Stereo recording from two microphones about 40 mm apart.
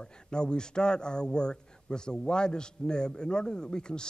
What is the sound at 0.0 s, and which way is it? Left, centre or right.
A man's voice, left.